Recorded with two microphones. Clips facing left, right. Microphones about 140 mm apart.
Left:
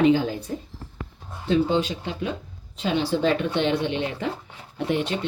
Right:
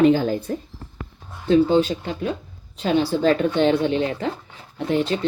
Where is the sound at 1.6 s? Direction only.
45° right (ahead or behind).